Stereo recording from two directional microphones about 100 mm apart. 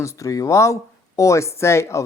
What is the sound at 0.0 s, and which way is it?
Speech, 30° left (ahead or behind).